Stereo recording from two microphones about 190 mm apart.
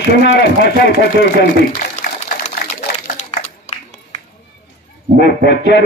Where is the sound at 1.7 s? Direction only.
40° left (ahead or behind).